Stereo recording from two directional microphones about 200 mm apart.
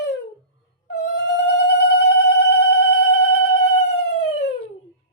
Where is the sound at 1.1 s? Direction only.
60° left (ahead or behind).